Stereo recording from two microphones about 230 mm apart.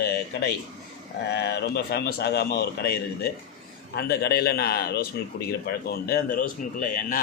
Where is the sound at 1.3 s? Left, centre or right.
Left.